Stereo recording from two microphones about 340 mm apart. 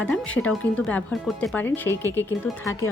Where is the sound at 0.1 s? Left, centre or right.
Centre.